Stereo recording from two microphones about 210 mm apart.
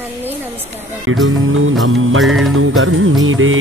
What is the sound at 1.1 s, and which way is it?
Music, 75° right (ahead or behind).